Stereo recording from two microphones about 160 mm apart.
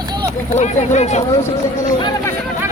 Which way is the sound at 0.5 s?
45° left (ahead or behind).